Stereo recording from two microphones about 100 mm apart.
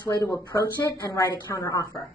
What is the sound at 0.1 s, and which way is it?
A woman's voice, 35° left (ahead or behind).